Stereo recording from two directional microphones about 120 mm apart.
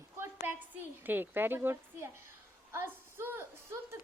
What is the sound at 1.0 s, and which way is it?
A woman's voice, 15° right (ahead or behind).